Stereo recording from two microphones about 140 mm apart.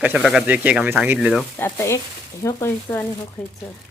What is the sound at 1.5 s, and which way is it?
Speech, 20° left (ahead or behind).